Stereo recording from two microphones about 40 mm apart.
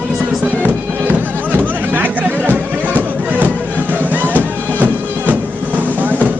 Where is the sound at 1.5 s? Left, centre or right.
Right.